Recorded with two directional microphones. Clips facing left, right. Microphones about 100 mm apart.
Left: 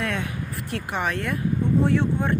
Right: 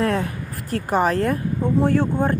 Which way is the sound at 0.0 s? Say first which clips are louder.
Right 7 dB; 40° right (ahead or behind).